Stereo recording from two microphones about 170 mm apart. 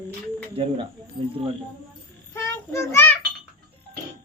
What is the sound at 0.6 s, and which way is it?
Speech, 30° right (ahead or behind).